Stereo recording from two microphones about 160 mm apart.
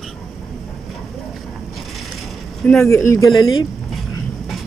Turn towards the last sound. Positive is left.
turn(degrees=20)  # may be behind; listen again after turning